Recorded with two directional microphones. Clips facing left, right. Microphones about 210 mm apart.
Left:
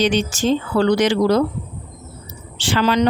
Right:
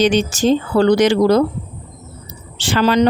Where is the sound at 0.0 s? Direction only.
45° right (ahead or behind).